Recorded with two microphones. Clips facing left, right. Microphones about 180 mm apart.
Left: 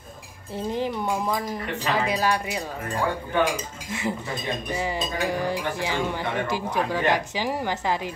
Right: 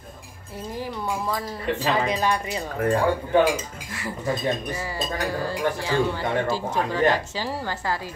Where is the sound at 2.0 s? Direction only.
5° left (ahead or behind).